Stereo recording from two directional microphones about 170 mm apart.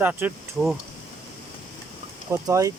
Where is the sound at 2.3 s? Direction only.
20° right (ahead or behind).